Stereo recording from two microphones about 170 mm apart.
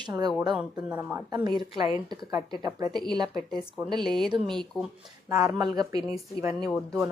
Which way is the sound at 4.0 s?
Centre (ahead or behind).